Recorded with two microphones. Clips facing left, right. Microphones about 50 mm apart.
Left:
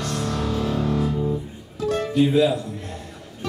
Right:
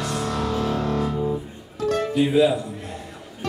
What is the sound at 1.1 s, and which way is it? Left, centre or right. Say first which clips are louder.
Music: even; centre.